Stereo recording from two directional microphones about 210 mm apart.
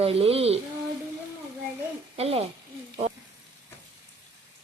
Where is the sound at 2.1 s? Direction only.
30° right (ahead or behind).